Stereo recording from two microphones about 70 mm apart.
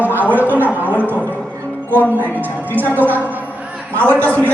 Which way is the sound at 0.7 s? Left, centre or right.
Right.